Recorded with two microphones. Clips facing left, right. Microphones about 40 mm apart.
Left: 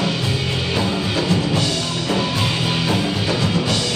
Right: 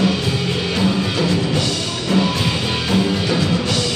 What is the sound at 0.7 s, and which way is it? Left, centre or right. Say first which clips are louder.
Music: right 2 dB; centre.